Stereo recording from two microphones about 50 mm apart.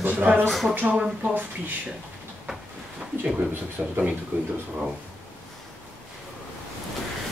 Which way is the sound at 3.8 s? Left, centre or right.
Centre.